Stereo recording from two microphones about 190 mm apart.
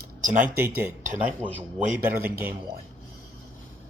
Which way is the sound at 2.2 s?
10° right (ahead or behind).